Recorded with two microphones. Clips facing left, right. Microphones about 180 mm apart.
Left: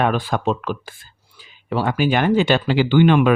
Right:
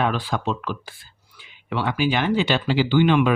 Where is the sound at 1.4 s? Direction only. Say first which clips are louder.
Left 4 dB; 40° left (ahead or behind).